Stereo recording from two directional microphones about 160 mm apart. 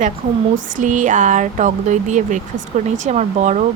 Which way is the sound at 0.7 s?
50° right (ahead or behind).